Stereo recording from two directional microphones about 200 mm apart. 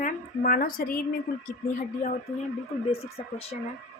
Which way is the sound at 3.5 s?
40° left (ahead or behind).